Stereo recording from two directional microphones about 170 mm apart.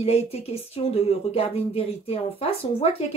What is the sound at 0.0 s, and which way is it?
Speech, 35° left (ahead or behind).